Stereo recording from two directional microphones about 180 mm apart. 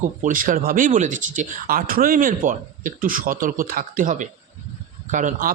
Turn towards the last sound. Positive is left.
turn(degrees=-45)  # may be behind; listen again after turning